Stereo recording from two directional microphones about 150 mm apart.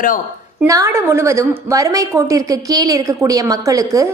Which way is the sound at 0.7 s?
20° right (ahead or behind).